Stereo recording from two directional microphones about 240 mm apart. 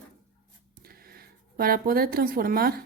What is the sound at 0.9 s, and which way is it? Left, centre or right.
Speech, right.